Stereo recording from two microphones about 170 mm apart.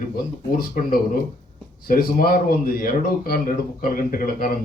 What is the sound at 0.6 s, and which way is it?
A man's voice, 55° left (ahead or behind).